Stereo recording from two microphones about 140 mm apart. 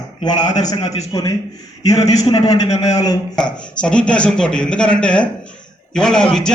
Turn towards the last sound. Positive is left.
turn(degrees=5)  # may be behind; listen again after turning